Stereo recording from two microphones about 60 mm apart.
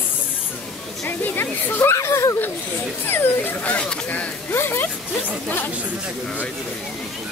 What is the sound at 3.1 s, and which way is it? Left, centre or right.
Speech, left.